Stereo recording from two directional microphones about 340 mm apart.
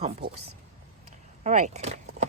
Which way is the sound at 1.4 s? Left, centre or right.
Centre.